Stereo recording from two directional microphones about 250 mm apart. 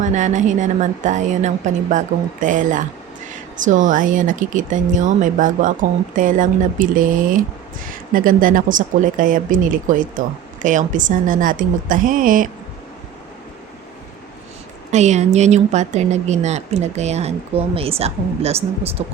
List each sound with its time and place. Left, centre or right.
0.0 s speech: right
14.9 s speech: right